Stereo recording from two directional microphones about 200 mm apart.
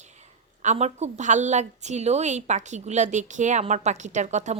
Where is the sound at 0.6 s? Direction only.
35° right (ahead or behind).